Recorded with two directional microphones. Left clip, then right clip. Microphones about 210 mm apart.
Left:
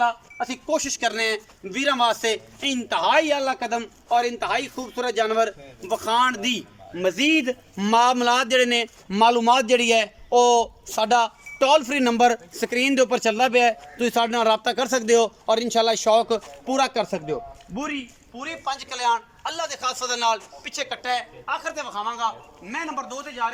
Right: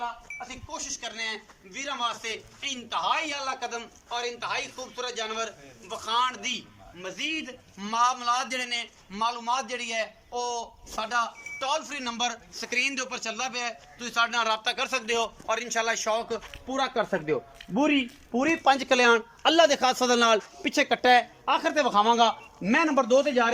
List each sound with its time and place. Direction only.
0.0 s speech: 50° left (ahead or behind); by 17.4 s 10° left (ahead or behind)
18.3 s a man's voice: 30° right (ahead or behind); by 23.5 s 45° right (ahead or behind)